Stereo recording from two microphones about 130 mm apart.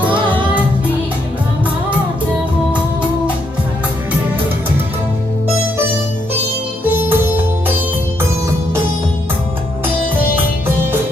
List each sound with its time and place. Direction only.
6.8 s music: 15° right (ahead or behind)